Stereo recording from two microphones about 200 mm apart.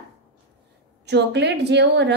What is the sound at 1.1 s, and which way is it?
Speech, 60° right (ahead or behind).